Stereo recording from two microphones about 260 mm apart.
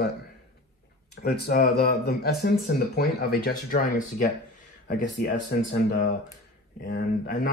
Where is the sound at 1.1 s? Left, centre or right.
Left.